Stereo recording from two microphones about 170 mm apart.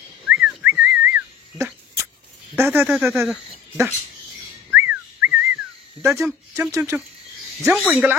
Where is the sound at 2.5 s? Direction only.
15° right (ahead or behind).